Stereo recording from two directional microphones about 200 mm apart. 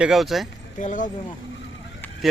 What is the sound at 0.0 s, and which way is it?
Speech, centre (ahead or behind).